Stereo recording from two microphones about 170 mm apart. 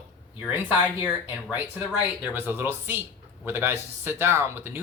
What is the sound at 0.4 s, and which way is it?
Speech, 10° right (ahead or behind).